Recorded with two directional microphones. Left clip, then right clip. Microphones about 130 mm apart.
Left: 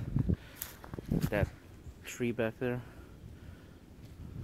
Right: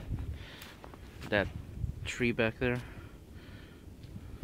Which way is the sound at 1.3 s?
15° right (ahead or behind).